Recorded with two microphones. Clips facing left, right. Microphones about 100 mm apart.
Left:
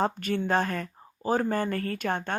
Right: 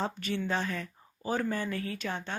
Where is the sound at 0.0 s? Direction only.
50° left (ahead or behind).